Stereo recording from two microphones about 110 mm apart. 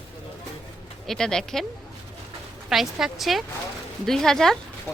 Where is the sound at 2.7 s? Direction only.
5° right (ahead or behind).